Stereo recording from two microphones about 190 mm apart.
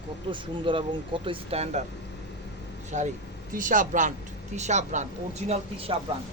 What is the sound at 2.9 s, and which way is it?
Speech, 40° right (ahead or behind).